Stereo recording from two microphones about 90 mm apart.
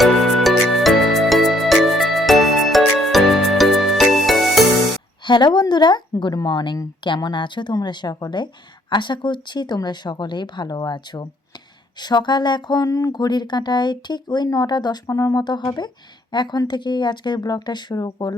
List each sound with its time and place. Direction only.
0.0 s music: centre (ahead or behind)
5.2 s speech: 55° left (ahead or behind)
15.0 s speech: 40° left (ahead or behind)